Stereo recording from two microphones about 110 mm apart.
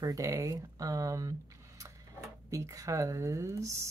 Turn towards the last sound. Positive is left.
turn(degrees=-25)  # may be behind; listen again after turning